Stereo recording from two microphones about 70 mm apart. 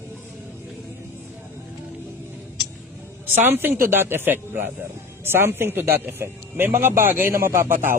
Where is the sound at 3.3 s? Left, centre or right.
Right.